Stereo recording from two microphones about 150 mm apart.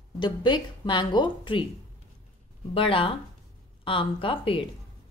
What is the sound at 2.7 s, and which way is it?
Speech, 35° left (ahead or behind).